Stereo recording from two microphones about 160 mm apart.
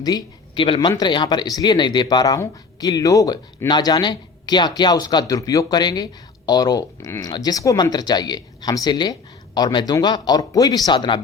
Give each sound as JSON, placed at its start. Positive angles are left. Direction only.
{"t": 0.0, "sound": "speech", "side_deg": 30}